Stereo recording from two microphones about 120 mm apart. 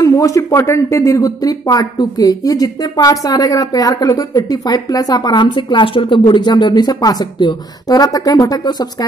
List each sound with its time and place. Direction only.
0.0 s speech: 25° left (ahead or behind)